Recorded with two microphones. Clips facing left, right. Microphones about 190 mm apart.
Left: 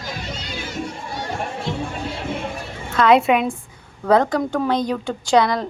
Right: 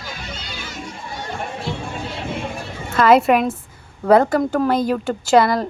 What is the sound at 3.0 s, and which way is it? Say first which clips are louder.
Speech: right 2 dB; centre (ahead or behind).